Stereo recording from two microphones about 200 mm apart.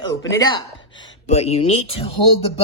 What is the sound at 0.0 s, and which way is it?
Speech, 15° left (ahead or behind).